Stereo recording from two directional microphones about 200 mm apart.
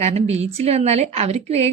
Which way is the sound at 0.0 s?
30° right (ahead or behind).